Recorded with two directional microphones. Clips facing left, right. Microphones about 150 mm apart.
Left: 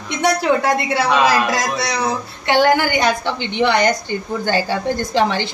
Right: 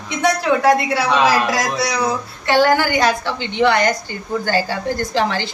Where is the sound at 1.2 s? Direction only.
25° left (ahead or behind).